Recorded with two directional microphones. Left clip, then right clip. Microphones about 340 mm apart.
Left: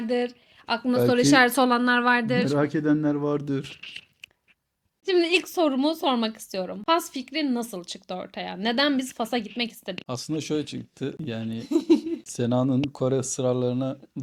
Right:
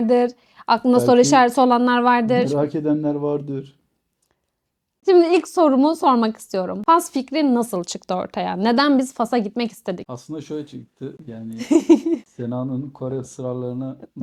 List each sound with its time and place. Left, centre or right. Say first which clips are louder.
0.1 s speech: right 8 dB; right
0.9 s speech: right 7 dB; right
1.3 s a woman's voice: right 5 dB; centre
2.6 s speech: right 3 dB; centre
5.0 s speech: right 8 dB; right
10.1 s speech: left 2 dB; left
11.6 s speech: right 7 dB; right
12.4 s speech: left 3 dB; left